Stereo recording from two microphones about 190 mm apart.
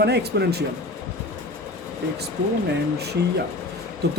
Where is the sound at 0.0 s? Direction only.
60° right (ahead or behind).